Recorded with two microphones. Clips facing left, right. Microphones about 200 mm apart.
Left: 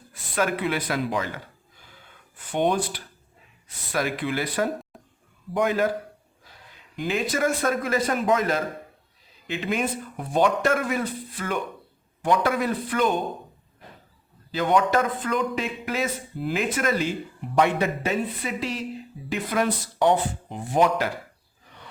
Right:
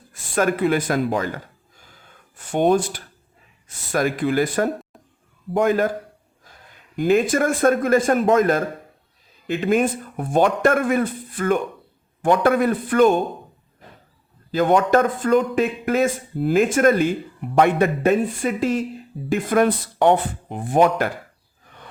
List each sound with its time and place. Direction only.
0.1 s a sound: 45° right (ahead or behind)
3.7 s a man's voice: 45° right (ahead or behind)
14.5 s a man's voice: 50° right (ahead or behind)